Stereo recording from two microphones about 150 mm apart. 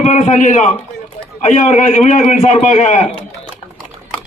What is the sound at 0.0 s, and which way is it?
A man's voice, 55° left (ahead or behind).